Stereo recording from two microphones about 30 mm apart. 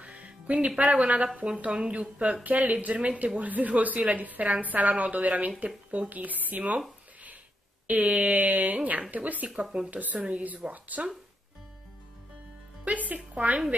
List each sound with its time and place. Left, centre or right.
0.0 s speech: right
1.2 s a woman's voice: right
1.6 s speech: right
2.4 s speech: right
2.7 s a woman's voice: right
6.6 s speech: right
7.8 s a woman's voice: right
9.6 s speech: right
9.8 s a woman's voice: right
12.8 s speech: right